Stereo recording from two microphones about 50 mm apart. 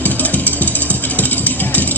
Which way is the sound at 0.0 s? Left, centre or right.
Left.